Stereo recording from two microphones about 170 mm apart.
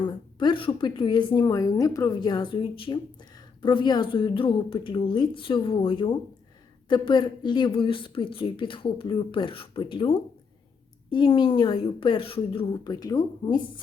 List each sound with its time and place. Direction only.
0.0 s speech: 30° left (ahead or behind)